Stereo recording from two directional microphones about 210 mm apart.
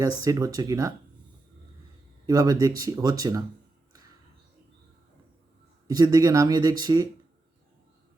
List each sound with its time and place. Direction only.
0.0 s speech: 15° right (ahead or behind)
2.2 s speech: 20° right (ahead or behind)
5.9 s speech: 20° right (ahead or behind)